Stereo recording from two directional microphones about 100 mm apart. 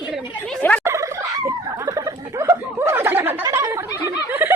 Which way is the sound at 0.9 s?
30° right (ahead or behind).